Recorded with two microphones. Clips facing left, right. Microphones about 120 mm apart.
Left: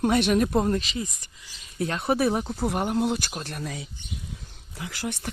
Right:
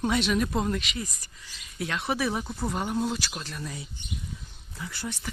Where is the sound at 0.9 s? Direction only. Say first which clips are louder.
Left 4 dB; 25° left (ahead or behind).